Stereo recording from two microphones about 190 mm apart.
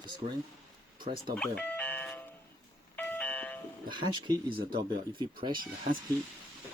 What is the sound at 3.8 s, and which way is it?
Speech, 25° right (ahead or behind).